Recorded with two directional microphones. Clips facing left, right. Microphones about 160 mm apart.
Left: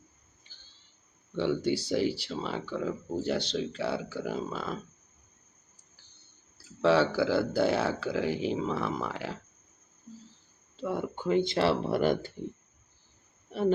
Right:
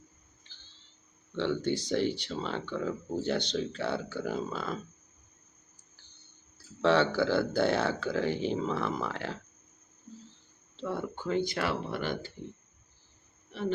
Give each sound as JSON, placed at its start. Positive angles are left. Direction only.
{"t": 0.4, "sound": "a sound", "side_deg": 10}
{"t": 1.4, "sound": "speech", "side_deg": 10}
{"t": 6.8, "sound": "speech", "side_deg": 5}
{"t": 10.8, "sound": "speech", "side_deg": 15}
{"t": 13.5, "sound": "speech", "side_deg": 40}